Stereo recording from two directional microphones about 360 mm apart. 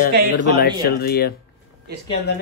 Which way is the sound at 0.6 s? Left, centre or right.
Left.